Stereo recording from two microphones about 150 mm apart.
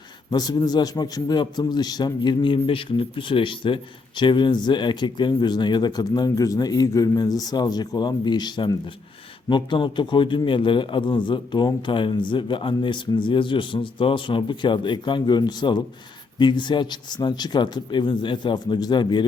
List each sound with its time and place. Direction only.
0.3 s a man's voice: 25° left (ahead or behind)